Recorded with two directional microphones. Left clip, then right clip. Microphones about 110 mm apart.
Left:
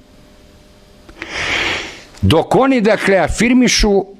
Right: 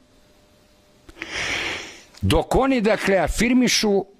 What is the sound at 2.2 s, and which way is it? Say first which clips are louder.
Speech: left 7 dB; 25° right (ahead or behind).